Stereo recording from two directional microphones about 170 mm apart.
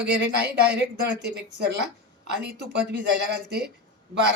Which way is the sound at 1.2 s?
90° right.